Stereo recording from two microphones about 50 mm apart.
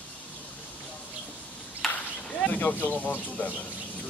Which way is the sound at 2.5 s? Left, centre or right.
Left.